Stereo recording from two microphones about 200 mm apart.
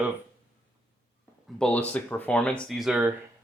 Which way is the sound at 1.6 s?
5° left (ahead or behind).